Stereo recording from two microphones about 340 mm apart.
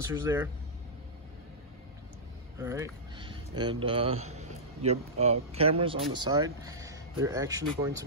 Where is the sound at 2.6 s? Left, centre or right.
Centre.